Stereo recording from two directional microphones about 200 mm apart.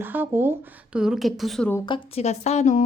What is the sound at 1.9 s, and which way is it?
Speech, 25° left (ahead or behind).